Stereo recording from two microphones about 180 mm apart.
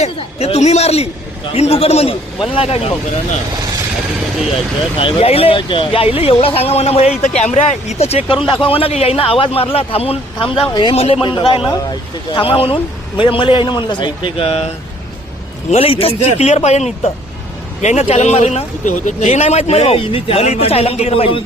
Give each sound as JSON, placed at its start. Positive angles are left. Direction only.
{"t": 0.0, "sound": "speech", "side_deg": 35}
{"t": 4.9, "sound": "speech", "side_deg": 30}
{"t": 15.7, "sound": "speech", "side_deg": 30}